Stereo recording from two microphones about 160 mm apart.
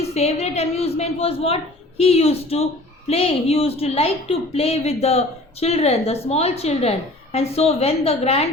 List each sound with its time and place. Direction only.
0.0 s a woman's voice: 40° left (ahead or behind)